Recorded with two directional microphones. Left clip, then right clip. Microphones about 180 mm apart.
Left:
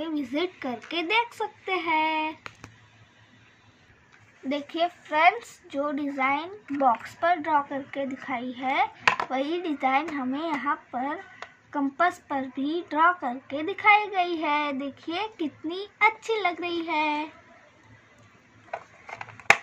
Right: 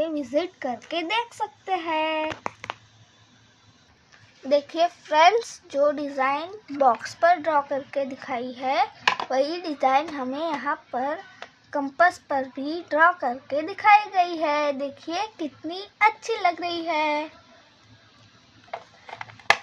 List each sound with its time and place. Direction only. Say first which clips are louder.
0.0 s a woman's voice: right 4 dB; 45° right (ahead or behind)
4.7 s a child's voice: right 1 dB; 55° right (ahead or behind); by 17.3 s 35° right (ahead or behind)
19.0 s a sound: left 1 dB; 10° right (ahead or behind)